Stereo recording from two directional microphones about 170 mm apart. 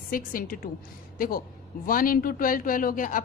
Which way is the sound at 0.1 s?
55° left (ahead or behind).